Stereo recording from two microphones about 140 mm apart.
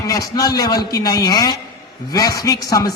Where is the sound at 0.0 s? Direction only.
25° left (ahead or behind).